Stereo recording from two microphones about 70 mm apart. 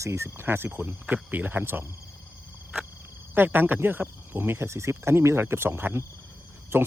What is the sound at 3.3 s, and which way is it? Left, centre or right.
Speech, right.